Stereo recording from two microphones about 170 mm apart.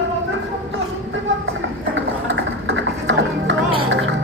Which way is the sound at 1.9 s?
90° right.